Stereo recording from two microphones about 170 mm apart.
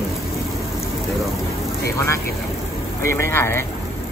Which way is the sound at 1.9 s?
15° left (ahead or behind).